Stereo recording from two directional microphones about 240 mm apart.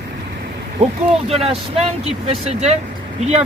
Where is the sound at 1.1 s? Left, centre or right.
Right.